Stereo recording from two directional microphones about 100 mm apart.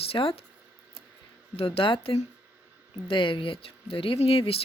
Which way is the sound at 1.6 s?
70° left (ahead or behind).